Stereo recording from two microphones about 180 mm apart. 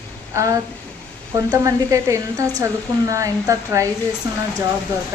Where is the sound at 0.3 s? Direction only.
15° right (ahead or behind).